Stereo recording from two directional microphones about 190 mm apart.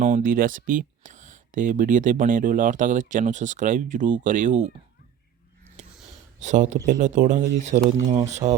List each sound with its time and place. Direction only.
0.0 s speech: 45° right (ahead or behind)
5.8 s a sound: 35° right (ahead or behind)
6.4 s speech: 40° right (ahead or behind)
8.0 s speech: 20° right (ahead or behind)
8.3 s speech: 35° right (ahead or behind)